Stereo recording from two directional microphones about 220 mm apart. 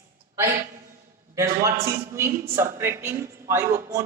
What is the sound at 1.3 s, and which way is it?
A man's voice, 15° right (ahead or behind).